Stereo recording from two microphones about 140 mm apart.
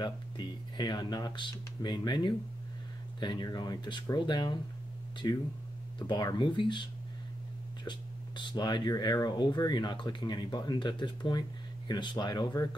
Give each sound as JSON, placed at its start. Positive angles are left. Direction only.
{"t": 0.7, "sound": "speech", "side_deg": 30}